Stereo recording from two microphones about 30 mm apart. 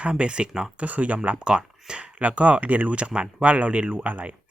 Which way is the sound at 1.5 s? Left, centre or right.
Right.